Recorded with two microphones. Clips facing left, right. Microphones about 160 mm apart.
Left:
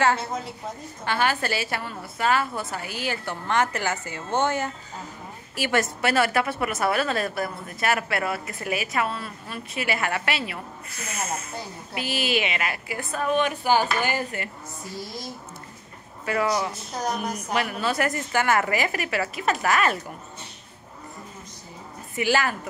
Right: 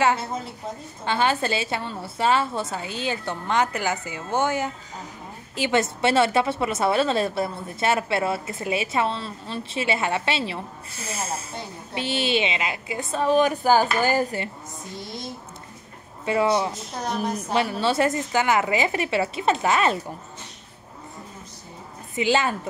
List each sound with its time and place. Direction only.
1.0 s a woman's voice: 20° right (ahead or behind); by 14.4 s 40° right (ahead or behind)
16.3 s a woman's voice: 25° right (ahead or behind)
22.1 s a woman's voice: 20° right (ahead or behind)